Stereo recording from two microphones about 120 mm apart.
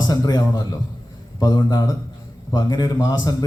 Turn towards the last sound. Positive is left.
turn(degrees=30)  # may be behind; listen again after turning